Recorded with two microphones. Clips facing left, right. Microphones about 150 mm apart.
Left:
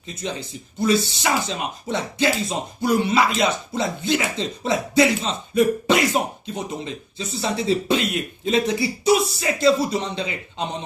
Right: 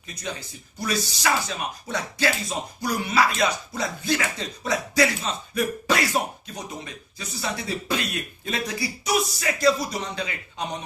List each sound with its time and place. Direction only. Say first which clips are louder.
0.1 s speech: left 5 dB; 25° left (ahead or behind)